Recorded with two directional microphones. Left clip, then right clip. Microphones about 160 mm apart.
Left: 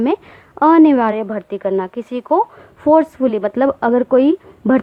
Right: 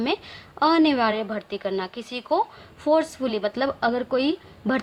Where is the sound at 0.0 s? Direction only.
35° left (ahead or behind).